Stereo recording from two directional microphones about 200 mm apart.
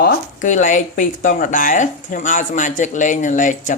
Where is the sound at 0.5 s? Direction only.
40° left (ahead or behind).